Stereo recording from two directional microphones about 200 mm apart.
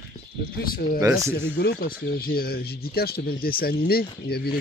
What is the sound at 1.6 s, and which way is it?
Speech, 50° left (ahead or behind).